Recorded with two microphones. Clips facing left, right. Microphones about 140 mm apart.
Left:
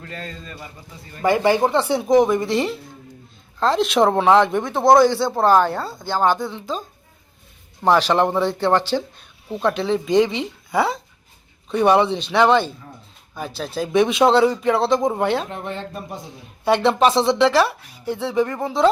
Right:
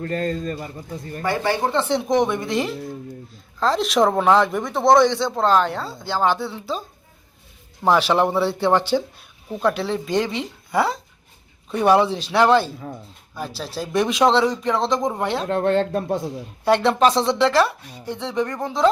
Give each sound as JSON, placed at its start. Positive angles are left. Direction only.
{"t": 0.0, "sound": "a man's voice", "side_deg": -45}
{"t": 1.2, "sound": "speech", "side_deg": 15}
{"t": 7.9, "sound": "speech", "side_deg": -5}
{"t": 15.4, "sound": "speech", "side_deg": -80}
{"t": 16.6, "sound": "speech", "side_deg": 0}